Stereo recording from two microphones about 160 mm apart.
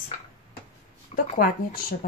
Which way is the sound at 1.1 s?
40° left (ahead or behind).